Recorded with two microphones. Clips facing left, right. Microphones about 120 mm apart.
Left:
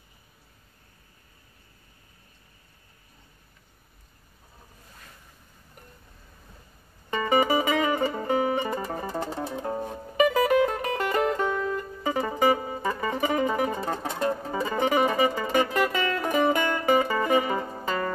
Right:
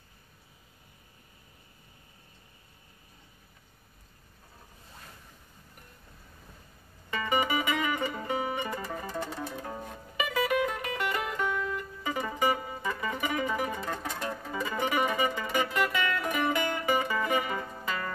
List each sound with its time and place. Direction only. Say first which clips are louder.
7.1 s music: left 6 dB; 35° left (ahead or behind)